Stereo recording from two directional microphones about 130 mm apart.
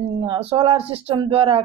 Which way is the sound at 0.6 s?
45° right (ahead or behind).